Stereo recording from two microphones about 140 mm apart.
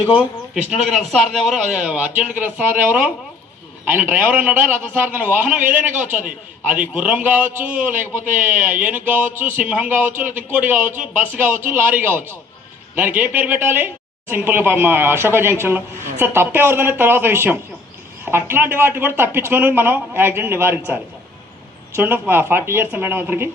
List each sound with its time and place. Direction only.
0.5 s a woman's voice: 5° right (ahead or behind)
6.7 s a woman's voice: 10° right (ahead or behind)